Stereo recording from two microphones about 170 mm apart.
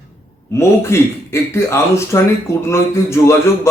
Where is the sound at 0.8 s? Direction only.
15° left (ahead or behind).